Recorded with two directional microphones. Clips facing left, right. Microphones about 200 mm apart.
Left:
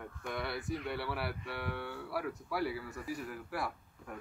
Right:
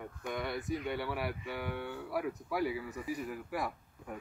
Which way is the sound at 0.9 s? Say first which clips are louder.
Right 2 dB; 10° right (ahead or behind).